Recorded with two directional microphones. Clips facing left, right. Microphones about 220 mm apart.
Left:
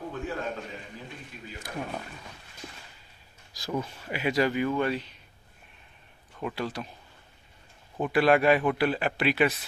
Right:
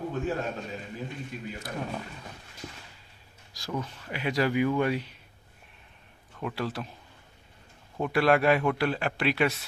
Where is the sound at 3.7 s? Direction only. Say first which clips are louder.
Left 2 dB; 10° left (ahead or behind).